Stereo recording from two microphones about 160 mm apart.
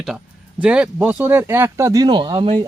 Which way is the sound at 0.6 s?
5° right (ahead or behind).